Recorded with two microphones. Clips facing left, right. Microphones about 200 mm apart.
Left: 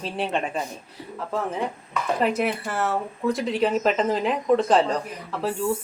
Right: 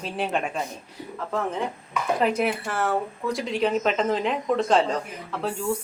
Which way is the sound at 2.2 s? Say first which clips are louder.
Even; centre (ahead or behind).